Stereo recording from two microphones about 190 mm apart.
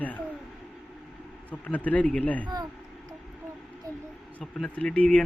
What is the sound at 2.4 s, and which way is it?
Speech, 20° right (ahead or behind).